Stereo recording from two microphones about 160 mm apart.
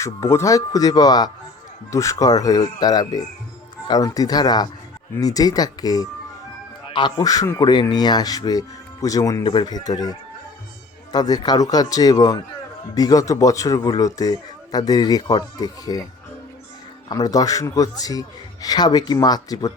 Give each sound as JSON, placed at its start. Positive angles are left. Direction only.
{"t": 0.0, "sound": "a man's voice", "side_deg": 15}
{"t": 17.1, "sound": "a man's voice", "side_deg": 25}